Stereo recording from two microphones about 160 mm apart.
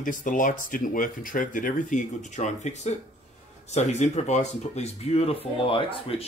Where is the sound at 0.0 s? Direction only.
55° left (ahead or behind).